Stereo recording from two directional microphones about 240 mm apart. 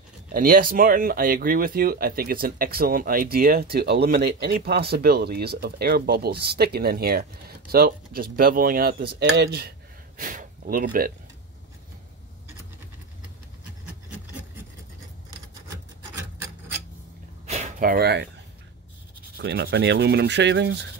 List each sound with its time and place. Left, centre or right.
0.3 s speech: right
15.7 s rub: centre
17.5 s a sound: right
19.3 s rub: right